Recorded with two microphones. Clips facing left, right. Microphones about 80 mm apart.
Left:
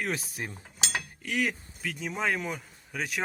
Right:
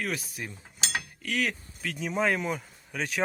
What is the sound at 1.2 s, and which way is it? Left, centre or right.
Speech, centre.